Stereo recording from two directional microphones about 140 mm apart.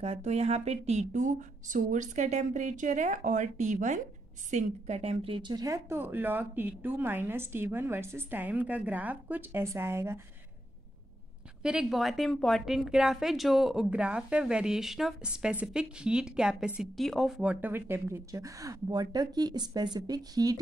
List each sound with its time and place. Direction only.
0.0 s speech: 50° right (ahead or behind); by 10.2 s 20° right (ahead or behind)
11.6 s a woman's voice: 5° right (ahead or behind); by 20.5 s 25° right (ahead or behind)